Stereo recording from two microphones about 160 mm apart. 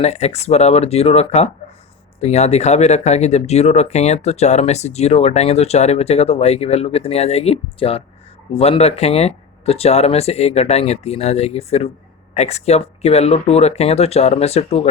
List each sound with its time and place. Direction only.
0.0 s speech: 40° left (ahead or behind)